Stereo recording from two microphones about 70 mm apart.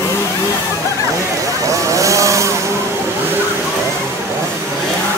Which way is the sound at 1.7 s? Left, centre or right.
Right.